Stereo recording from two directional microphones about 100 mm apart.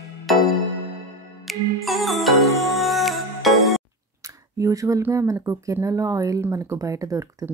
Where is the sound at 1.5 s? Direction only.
Centre (ahead or behind).